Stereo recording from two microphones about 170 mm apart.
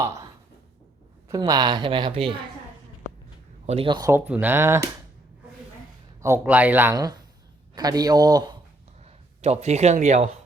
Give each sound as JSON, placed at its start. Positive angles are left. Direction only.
{"t": 1.3, "sound": "a woman's voice", "side_deg": -20}
{"t": 3.7, "sound": "a woman's voice", "side_deg": -30}
{"t": 4.1, "sound": "speech", "side_deg": -10}
{"t": 6.2, "sound": "speech", "side_deg": -15}
{"t": 6.9, "sound": "a woman's voice", "side_deg": -25}
{"t": 9.0, "sound": "speech", "side_deg": -40}